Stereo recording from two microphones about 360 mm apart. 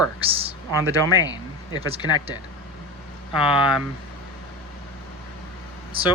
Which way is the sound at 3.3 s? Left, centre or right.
Centre.